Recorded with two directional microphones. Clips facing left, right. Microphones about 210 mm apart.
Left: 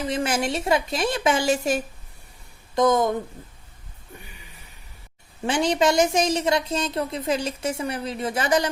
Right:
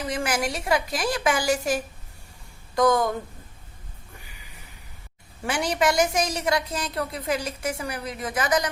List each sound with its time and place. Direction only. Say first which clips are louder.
0.0 s a woman's voice: left 2 dB; 25° left (ahead or behind)
5.5 s a woman's voice: left 3 dB; 25° left (ahead or behind)